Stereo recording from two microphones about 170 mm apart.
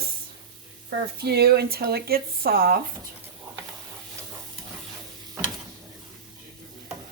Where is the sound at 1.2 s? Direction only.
70° right (ahead or behind).